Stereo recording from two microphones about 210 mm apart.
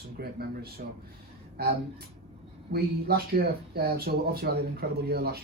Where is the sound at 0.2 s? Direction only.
50° right (ahead or behind).